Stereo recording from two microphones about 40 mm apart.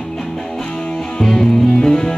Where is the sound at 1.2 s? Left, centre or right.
Centre.